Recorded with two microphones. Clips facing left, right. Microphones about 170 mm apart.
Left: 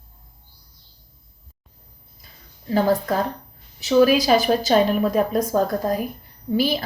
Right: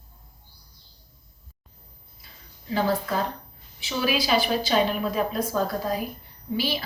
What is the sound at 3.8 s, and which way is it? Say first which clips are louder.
Speech: left 10 dB; 45° left (ahead or behind).